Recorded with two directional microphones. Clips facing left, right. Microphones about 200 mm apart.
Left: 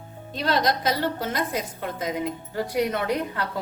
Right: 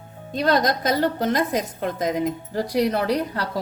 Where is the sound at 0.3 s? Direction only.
45° right (ahead or behind).